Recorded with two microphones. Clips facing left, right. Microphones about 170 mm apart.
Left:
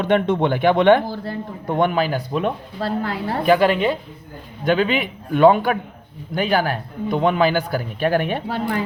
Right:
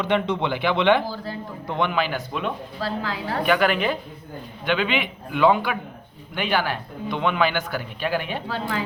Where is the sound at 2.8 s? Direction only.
55° left (ahead or behind).